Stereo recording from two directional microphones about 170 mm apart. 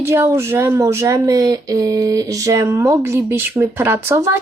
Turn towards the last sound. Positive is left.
turn(degrees=-15)  # may be behind; listen again after turning